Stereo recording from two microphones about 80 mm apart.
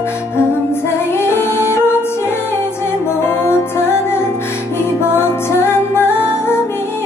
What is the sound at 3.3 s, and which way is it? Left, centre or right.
Music, left.